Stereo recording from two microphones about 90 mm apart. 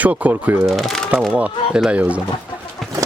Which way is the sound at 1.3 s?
15° right (ahead or behind).